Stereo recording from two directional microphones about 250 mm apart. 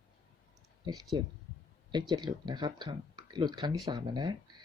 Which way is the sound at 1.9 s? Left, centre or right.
Centre.